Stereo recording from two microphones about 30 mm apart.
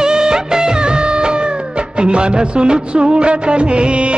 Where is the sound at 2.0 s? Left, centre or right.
Right.